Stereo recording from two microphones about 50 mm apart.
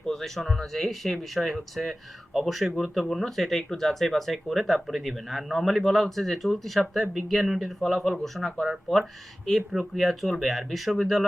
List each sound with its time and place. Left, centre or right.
0.0 s speech: centre